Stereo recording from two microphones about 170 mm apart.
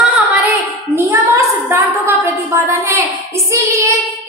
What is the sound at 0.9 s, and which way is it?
A woman's voice, 20° right (ahead or behind).